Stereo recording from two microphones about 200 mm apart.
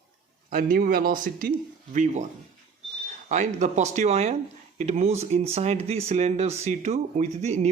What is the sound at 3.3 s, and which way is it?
Speech, 35° right (ahead or behind).